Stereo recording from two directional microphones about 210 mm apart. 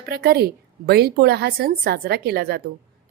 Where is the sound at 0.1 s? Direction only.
50° right (ahead or behind).